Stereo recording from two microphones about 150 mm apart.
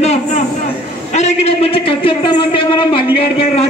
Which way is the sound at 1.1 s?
45° left (ahead or behind).